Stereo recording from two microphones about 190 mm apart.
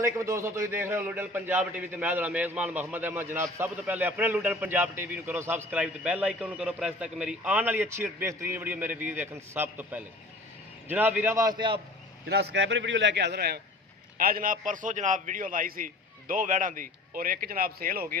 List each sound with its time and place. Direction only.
0.0 s a man's voice: 15° right (ahead or behind)
12.3 s a man's voice: 60° right (ahead or behind)